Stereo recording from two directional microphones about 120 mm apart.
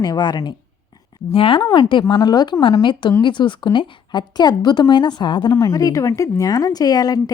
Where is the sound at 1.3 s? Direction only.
50° left (ahead or behind).